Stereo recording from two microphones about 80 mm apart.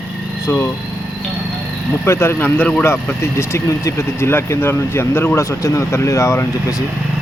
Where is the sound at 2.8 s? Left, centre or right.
Left.